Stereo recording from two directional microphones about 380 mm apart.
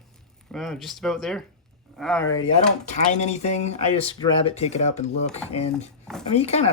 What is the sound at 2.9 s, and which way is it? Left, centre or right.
Speech, centre.